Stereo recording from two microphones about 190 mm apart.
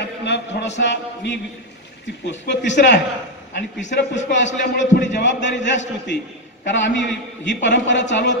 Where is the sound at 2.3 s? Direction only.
70° left (ahead or behind).